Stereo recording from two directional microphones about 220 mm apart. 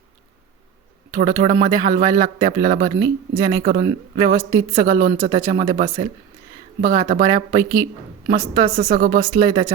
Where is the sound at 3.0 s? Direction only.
20° right (ahead or behind).